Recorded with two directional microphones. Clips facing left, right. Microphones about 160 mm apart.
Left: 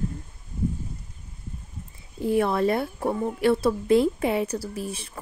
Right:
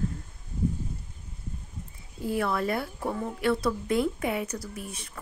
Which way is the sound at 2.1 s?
25° left (ahead or behind).